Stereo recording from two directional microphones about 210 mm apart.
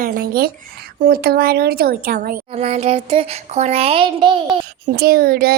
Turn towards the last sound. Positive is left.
turn(degrees=-45)  # may be behind; listen again after turning